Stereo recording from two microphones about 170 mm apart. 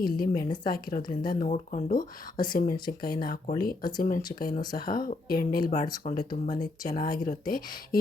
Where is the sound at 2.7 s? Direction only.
25° left (ahead or behind).